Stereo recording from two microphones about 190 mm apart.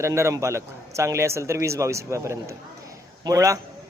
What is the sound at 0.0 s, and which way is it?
A man's voice, 15° right (ahead or behind).